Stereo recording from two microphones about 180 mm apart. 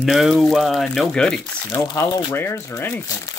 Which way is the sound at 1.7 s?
20° left (ahead or behind).